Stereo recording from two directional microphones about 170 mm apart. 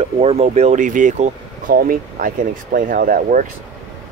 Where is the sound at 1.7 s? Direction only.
55° right (ahead or behind).